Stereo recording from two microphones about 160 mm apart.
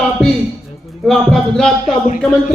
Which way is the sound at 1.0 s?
5° left (ahead or behind).